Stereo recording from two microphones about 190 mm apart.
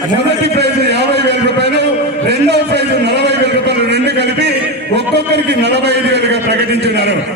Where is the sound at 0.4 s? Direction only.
60° right (ahead or behind).